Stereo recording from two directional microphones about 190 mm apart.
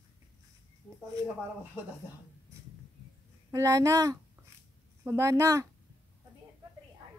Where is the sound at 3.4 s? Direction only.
15° right (ahead or behind).